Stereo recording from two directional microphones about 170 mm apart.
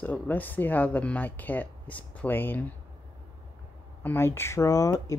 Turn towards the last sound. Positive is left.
turn(degrees=20)  # may be behind; listen again after turning